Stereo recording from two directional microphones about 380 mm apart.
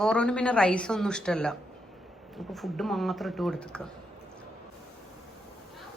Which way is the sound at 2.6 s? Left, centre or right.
Centre.